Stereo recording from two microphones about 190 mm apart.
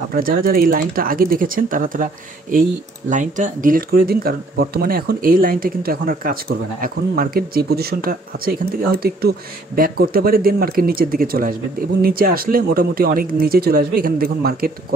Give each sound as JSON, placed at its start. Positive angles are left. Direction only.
{"t": 0.1, "sound": "speech", "side_deg": -50}
{"t": 3.1, "sound": "speech", "side_deg": -40}